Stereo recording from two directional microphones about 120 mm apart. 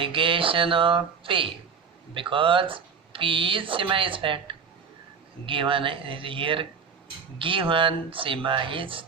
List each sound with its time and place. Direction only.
0.0 s speech: 45° right (ahead or behind)